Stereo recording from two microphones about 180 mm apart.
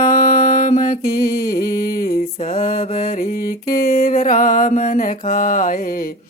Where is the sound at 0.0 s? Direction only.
50° left (ahead or behind).